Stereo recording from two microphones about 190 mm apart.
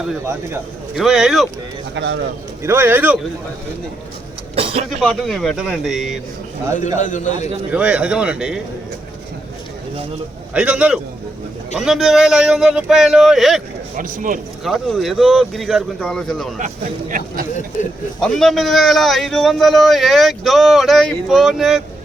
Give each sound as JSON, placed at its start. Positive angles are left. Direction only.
{"t": 0.9, "sound": "speech", "side_deg": 0}
{"t": 2.0, "sound": "a man's voice", "side_deg": -70}
{"t": 2.6, "sound": "speech", "side_deg": -10}
{"t": 4.5, "sound": "vehicle", "side_deg": -30}
{"t": 4.9, "sound": "speech", "side_deg": 0}
{"t": 7.0, "sound": "a man's voice", "side_deg": 40}
{"t": 7.7, "sound": "speech", "side_deg": -5}
{"t": 10.5, "sound": "speech", "side_deg": -5}
{"t": 13.9, "sound": "a man's voice", "side_deg": -45}
{"t": 14.6, "sound": "speech", "side_deg": 0}
{"t": 16.6, "sound": "a man's voice", "side_deg": -45}
{"t": 18.2, "sound": "speech", "side_deg": 0}